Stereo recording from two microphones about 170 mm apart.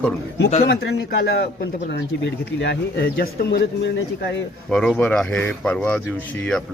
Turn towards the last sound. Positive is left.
turn(degrees=5)  # may be behind; listen again after turning